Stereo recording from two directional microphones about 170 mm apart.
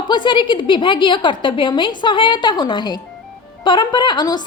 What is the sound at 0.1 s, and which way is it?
A woman's voice, 30° left (ahead or behind).